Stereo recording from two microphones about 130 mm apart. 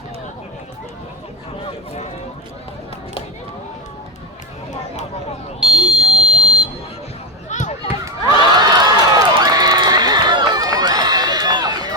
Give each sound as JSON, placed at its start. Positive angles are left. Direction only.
{"t": 5.5, "sound": "buzzer", "side_deg": -5}
{"t": 7.5, "sound": "a sound", "side_deg": 65}
{"t": 8.5, "sound": "run", "side_deg": -30}